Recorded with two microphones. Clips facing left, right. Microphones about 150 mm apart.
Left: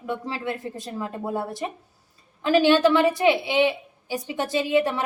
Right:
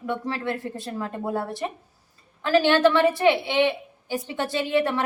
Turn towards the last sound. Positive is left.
turn(degrees=15)  # may be behind; listen again after turning